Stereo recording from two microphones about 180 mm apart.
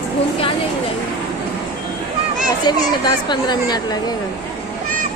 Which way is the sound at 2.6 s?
25° left (ahead or behind).